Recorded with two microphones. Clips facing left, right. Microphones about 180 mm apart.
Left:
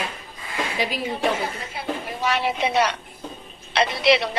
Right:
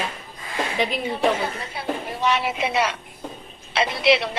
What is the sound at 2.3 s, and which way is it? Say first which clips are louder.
A man's voice: left 1 dB; centre (ahead or behind).